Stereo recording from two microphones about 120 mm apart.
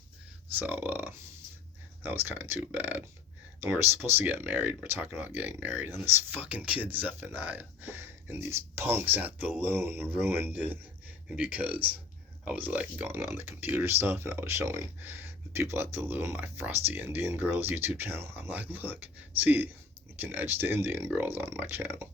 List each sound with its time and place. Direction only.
0.6 s speech: 15° right (ahead or behind)
2.2 s speech: 15° right (ahead or behind)